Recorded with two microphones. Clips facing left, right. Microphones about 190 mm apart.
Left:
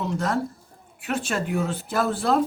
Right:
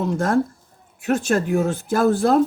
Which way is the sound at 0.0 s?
50° right (ahead or behind).